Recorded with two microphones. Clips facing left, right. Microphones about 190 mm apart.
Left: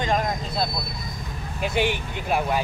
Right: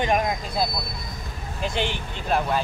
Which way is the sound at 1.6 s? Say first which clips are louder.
Left 3 dB; 10° left (ahead or behind).